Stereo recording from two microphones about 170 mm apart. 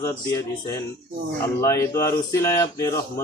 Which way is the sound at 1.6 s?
15° left (ahead or behind).